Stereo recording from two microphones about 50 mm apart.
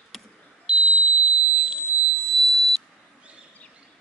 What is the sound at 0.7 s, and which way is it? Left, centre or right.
Smoke detector, centre.